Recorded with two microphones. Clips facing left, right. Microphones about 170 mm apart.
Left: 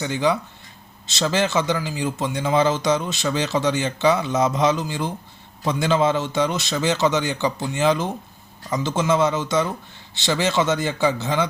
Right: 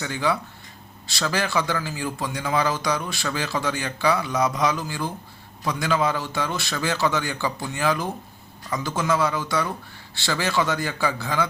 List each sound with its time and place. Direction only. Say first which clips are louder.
0.0 s speech: left 4 dB; 20° left (ahead or behind)